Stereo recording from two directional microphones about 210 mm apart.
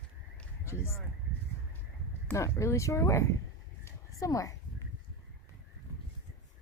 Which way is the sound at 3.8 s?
15° left (ahead or behind).